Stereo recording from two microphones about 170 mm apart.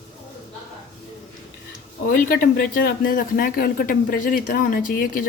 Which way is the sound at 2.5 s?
60° left (ahead or behind).